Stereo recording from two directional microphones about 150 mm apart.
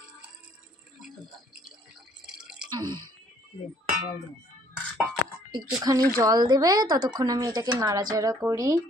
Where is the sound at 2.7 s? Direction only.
30° right (ahead or behind).